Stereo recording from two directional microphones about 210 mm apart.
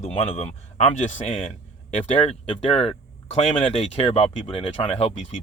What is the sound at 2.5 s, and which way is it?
Speech, 30° left (ahead or behind).